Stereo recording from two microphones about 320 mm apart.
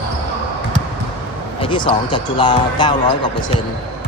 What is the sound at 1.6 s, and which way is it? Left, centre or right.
Speech, centre.